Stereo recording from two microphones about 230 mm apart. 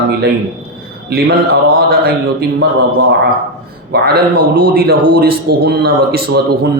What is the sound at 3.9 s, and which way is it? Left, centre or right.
A man's voice, right.